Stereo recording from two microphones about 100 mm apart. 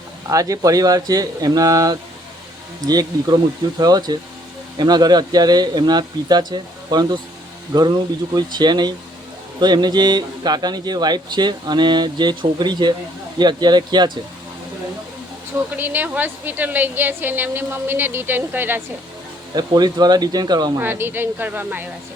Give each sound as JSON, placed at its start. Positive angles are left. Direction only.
{"t": 0.3, "sound": "a man's voice", "side_deg": -35}
{"t": 15.7, "sound": "a woman's voice", "side_deg": -20}
{"t": 19.5, "sound": "a man's voice", "side_deg": -40}
{"t": 20.7, "sound": "a woman's voice", "side_deg": -20}